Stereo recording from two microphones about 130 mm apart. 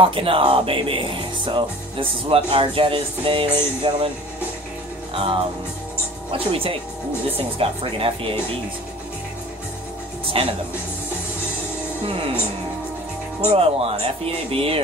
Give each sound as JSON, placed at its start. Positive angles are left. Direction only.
{"t": 0.0, "sound": "speech", "side_deg": -45}
{"t": 5.1, "sound": "music", "side_deg": -45}
{"t": 6.3, "sound": "speech", "side_deg": -45}
{"t": 10.3, "sound": "speech", "side_deg": -45}
{"t": 12.0, "sound": "speech", "side_deg": -50}
{"t": 13.5, "sound": "speech", "side_deg": -50}